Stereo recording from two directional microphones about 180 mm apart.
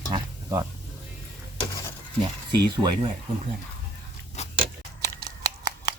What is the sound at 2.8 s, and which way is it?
Speech, 10° right (ahead or behind).